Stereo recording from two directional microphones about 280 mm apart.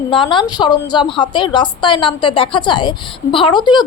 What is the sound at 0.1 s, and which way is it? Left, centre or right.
A woman's voice, centre.